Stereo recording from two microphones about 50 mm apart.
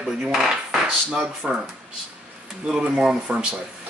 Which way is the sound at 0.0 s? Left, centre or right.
Centre.